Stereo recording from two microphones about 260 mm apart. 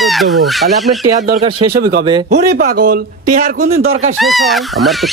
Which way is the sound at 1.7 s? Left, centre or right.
Right.